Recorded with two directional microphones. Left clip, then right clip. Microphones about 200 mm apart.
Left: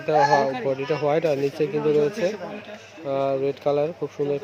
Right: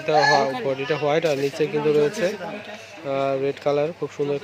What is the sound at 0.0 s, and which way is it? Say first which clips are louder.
Speech: right 1 dB; 5° left (ahead or behind).